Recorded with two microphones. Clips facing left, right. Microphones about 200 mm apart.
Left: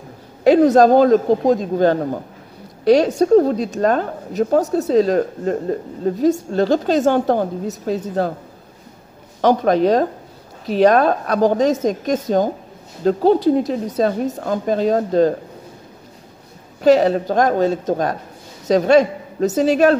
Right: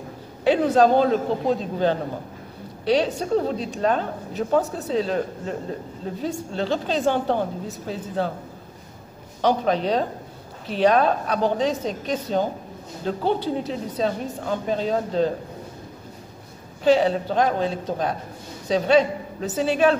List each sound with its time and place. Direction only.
0.4 s a woman's voice: 40° left (ahead or behind)
9.4 s a woman's voice: 45° left (ahead or behind)
16.8 s a woman's voice: 45° left (ahead or behind)